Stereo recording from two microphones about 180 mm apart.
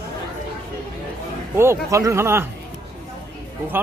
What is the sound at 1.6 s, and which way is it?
Speech, 15° right (ahead or behind).